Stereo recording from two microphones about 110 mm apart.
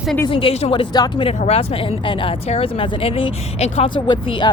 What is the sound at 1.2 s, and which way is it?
Speech, 70° left (ahead or behind).